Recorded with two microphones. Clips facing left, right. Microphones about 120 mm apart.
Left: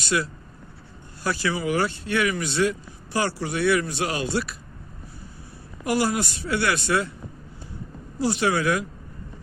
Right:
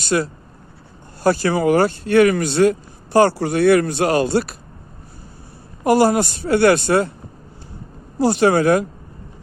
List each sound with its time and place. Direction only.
0.0 s speech: 40° right (ahead or behind)
5.8 s speech: 40° right (ahead or behind)
8.2 s speech: 45° right (ahead or behind)